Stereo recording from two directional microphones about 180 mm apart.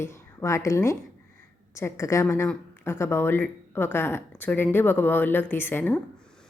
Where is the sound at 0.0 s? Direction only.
15° left (ahead or behind).